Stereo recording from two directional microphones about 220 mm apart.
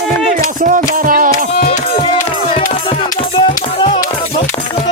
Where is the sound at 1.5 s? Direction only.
35° left (ahead or behind).